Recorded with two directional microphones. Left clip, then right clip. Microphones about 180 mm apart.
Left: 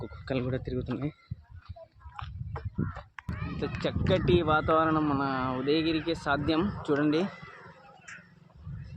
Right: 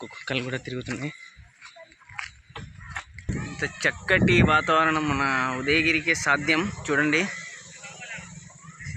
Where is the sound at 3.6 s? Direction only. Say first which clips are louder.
Right 7 dB; 5° right (ahead or behind).